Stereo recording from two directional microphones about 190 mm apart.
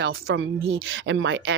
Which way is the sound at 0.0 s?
90° right.